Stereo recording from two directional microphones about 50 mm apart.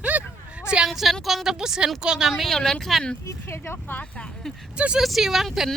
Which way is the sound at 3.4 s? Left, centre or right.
Left.